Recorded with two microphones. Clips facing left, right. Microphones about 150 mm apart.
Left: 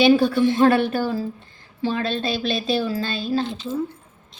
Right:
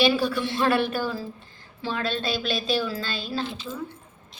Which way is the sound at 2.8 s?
40° left (ahead or behind).